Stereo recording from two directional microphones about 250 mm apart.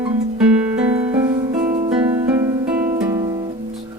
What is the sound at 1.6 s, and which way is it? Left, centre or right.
Music, right.